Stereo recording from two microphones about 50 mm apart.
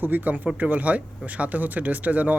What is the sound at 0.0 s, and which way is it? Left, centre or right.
Speech, right.